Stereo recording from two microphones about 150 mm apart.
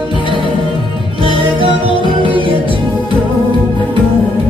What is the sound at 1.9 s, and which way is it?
Music, 35° left (ahead or behind).